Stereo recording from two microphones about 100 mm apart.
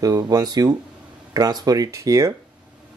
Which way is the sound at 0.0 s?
40° right (ahead or behind).